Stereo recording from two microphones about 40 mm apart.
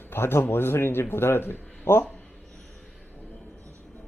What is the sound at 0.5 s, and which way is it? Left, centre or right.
Speech, left.